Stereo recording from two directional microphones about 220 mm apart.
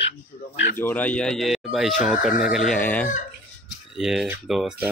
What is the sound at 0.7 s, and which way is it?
Speech, 10° left (ahead or behind).